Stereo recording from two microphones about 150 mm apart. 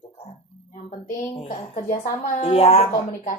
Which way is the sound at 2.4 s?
40° left (ahead or behind).